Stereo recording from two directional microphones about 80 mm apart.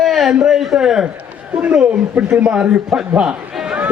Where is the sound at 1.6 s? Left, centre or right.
Centre.